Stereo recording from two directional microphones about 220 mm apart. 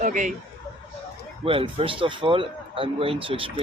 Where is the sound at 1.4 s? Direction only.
25° right (ahead or behind).